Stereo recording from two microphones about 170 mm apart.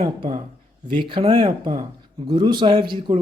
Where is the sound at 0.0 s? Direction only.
25° right (ahead or behind).